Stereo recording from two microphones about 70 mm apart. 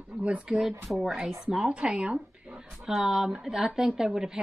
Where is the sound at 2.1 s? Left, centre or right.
Right.